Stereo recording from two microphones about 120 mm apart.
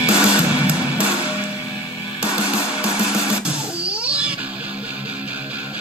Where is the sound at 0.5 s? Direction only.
10° right (ahead or behind).